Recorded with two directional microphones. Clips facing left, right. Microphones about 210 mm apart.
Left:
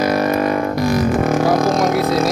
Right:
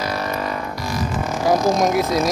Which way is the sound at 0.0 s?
50° left (ahead or behind).